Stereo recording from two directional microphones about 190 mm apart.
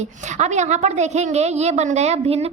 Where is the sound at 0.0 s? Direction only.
40° right (ahead or behind).